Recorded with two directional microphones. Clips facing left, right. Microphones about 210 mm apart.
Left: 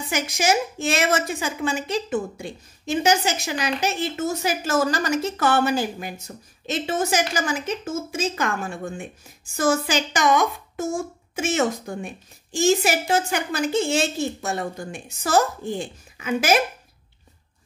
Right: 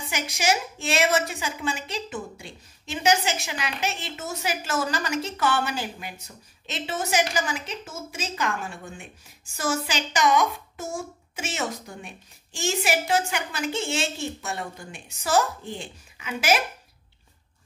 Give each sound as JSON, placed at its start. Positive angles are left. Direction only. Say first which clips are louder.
{"t": 0.1, "sound": "a woman's voice", "louder": "left 4 dB", "side_deg": 50}